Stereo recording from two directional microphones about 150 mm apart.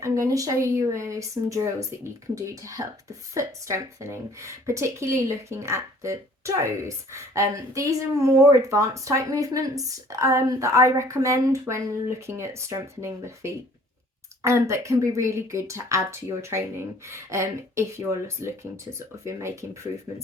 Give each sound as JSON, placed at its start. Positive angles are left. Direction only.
{"t": 0.0, "sound": "speech", "side_deg": -20}